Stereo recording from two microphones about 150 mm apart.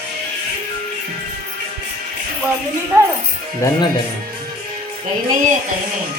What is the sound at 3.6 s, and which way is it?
Speech, 20° left (ahead or behind).